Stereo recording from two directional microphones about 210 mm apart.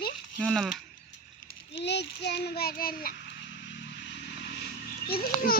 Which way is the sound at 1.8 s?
55° left (ahead or behind).